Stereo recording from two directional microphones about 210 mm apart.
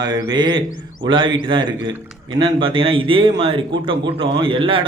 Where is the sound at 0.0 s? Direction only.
20° right (ahead or behind).